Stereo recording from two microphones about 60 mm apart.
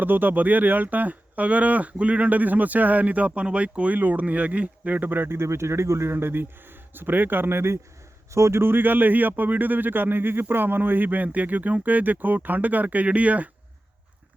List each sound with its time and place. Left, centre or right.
0.0 s speech: right